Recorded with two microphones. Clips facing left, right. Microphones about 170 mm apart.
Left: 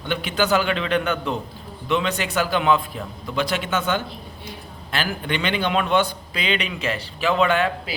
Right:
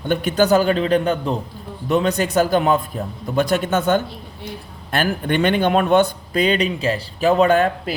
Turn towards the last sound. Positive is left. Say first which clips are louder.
# right 5 dB
turn(degrees=-45)  # may be behind; listen again after turning